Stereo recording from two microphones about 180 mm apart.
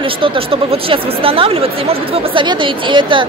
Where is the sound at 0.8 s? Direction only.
30° right (ahead or behind).